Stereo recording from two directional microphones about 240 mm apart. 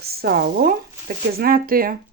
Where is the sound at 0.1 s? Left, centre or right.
Right.